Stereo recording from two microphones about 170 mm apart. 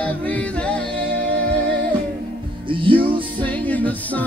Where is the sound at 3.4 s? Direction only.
10° left (ahead or behind).